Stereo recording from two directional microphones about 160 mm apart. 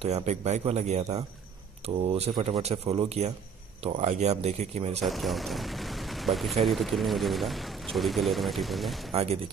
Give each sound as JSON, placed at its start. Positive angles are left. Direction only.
{"t": 0.0, "sound": "a man's voice", "side_deg": -45}
{"t": 5.0, "sound": "speech", "side_deg": 0}
{"t": 9.1, "sound": "speech", "side_deg": -40}